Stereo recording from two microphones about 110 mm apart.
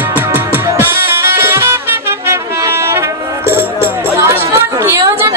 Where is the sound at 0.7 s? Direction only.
20° right (ahead or behind).